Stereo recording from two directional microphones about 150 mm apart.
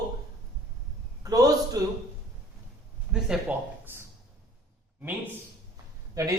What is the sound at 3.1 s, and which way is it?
Speech, 5° right (ahead or behind).